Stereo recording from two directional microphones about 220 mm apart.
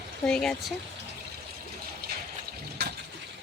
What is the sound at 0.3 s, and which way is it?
Speech, 5° left (ahead or behind).